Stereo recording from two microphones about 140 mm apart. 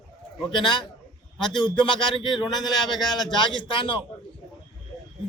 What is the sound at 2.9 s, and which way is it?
Speech, centre (ahead or behind).